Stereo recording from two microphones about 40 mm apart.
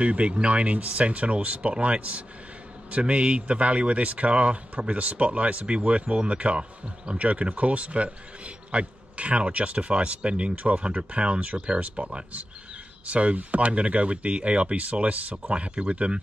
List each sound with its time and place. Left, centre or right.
0.0 s speech: right
11.8 s speech: right
15.5 s speech: right